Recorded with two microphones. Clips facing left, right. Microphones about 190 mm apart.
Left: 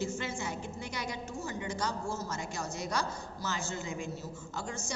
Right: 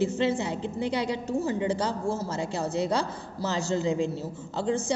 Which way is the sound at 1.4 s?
30° right (ahead or behind).